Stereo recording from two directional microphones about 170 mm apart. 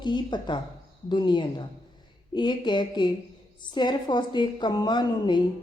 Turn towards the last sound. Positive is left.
turn(degrees=25)  # may be behind; listen again after turning